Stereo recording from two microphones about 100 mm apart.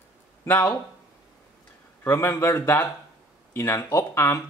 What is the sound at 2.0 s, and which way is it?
Speech, 30° left (ahead or behind).